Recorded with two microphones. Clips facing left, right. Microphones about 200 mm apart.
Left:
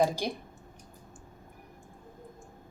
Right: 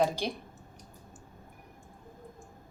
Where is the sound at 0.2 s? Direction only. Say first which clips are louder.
Left 1 dB; 10° left (ahead or behind).